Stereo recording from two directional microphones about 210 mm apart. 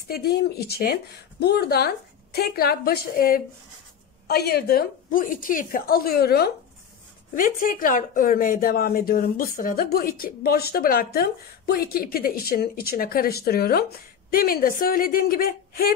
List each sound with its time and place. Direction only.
0.1 s speech: 50° left (ahead or behind)